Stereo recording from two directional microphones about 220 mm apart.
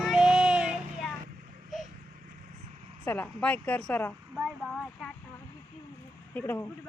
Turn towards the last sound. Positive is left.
turn(degrees=10)  # may be behind; listen again after turning